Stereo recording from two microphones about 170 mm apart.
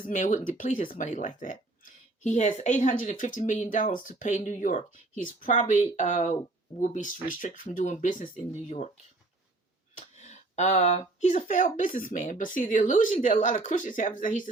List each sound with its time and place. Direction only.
0.1 s speech: 45° left (ahead or behind)
10.2 s speech: 45° left (ahead or behind)